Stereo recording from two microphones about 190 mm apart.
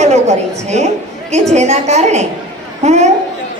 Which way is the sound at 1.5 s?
35° right (ahead or behind).